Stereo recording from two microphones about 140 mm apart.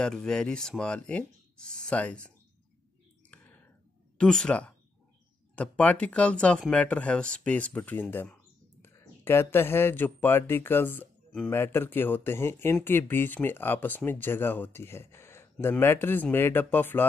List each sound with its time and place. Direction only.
0.0 s speech: 5° left (ahead or behind)
3.3 s clicking: 10° left (ahead or behind)
4.2 s speech: 5° left (ahead or behind)